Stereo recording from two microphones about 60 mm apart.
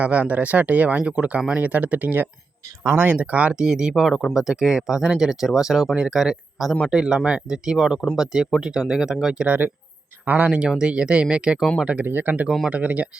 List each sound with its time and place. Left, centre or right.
0.0 s speech: right
3.5 s speech: centre
9.5 s speech: right
10.2 s speech: right
12.0 s speech: right